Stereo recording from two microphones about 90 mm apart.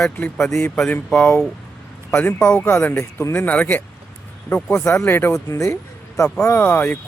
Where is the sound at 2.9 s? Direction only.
35° left (ahead or behind).